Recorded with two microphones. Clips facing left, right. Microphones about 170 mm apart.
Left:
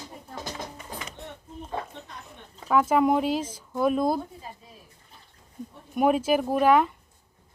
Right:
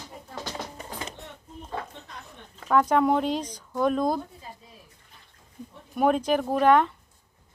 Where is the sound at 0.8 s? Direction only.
35° right (ahead or behind).